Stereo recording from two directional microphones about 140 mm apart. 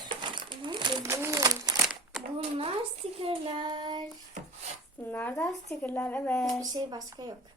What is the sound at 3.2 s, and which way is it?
Speech, 45° right (ahead or behind).